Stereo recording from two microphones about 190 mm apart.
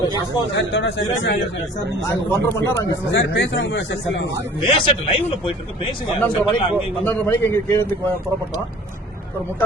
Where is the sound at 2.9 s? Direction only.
80° left.